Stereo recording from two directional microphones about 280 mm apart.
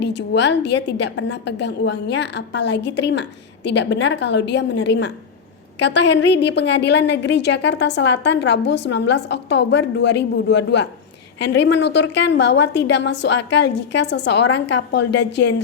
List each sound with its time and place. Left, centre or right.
0.0 s a woman's voice: left